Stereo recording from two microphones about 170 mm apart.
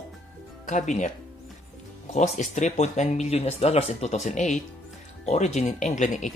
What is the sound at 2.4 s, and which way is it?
Speech, 45° left (ahead or behind).